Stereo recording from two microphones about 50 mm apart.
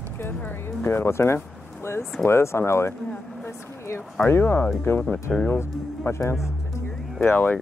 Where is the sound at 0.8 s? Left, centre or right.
Left.